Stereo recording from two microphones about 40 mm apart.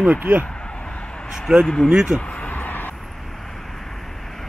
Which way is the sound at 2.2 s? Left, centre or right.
Left.